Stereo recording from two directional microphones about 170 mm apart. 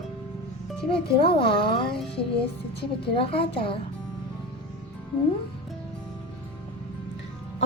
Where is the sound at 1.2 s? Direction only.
30° left (ahead or behind).